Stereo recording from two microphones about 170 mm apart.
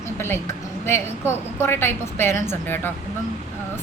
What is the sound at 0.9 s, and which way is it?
A woman's voice, 15° left (ahead or behind).